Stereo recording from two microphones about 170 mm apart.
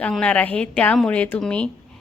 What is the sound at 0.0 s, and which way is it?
Speech, 5° left (ahead or behind).